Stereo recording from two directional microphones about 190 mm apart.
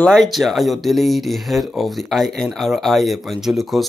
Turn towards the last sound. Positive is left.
turn(degrees=0)  # may be behind; listen again after turning